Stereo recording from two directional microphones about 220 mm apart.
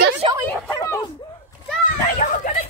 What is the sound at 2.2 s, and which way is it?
Speech, 35° left (ahead or behind).